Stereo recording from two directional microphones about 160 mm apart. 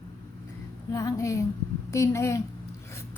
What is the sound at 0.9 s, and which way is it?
A woman's voice, 20° left (ahead or behind).